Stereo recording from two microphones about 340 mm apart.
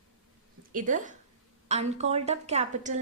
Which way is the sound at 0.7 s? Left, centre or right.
Right.